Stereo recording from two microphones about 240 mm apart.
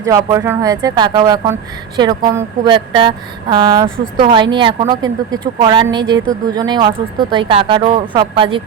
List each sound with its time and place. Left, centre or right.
0.0 s a woman's voice: centre